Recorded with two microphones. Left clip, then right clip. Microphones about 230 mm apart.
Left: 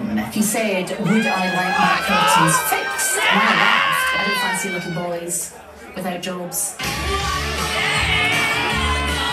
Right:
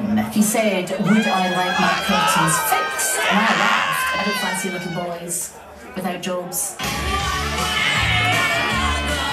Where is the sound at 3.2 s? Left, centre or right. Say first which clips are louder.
Left 2 dB; left.